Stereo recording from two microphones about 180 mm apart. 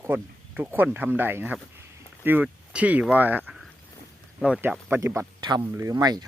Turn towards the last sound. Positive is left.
turn(degrees=-20)  # may be behind; listen again after turning